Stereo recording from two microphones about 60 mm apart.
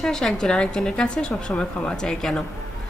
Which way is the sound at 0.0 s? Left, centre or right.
Centre.